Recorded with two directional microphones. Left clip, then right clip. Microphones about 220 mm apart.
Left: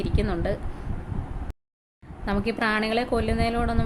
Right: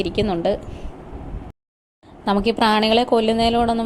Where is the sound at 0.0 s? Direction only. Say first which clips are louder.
Right 8 dB; 20° right (ahead or behind).